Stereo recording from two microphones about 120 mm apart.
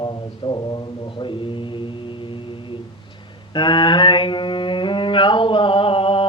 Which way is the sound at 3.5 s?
40° left (ahead or behind).